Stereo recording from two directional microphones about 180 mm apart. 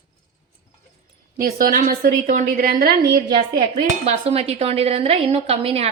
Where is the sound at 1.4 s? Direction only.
50° right (ahead or behind).